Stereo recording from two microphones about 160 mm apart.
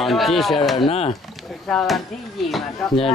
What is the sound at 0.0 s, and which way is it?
Speech, centre (ahead or behind).